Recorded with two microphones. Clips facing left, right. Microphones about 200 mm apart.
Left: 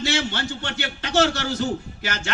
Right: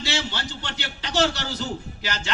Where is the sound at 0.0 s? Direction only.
50° left (ahead or behind).